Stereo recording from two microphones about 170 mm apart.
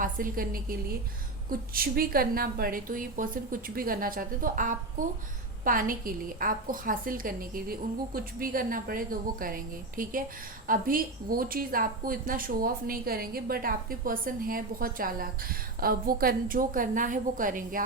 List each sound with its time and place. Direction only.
0.0 s a woman's voice: 55° right (ahead or behind)